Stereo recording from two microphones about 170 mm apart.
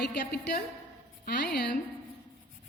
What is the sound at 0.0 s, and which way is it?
A woman's voice, 75° left (ahead or behind).